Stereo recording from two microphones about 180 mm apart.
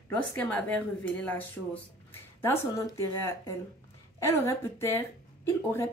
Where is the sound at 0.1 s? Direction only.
10° left (ahead or behind).